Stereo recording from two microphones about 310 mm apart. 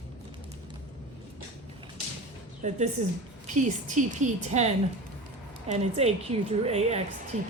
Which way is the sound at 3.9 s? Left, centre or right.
Right.